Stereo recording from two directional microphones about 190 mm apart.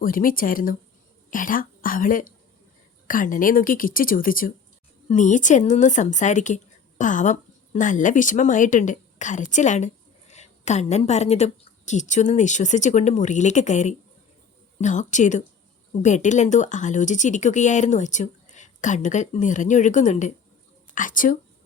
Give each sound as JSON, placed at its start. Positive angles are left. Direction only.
{"t": 0.0, "sound": "speech", "side_deg": 45}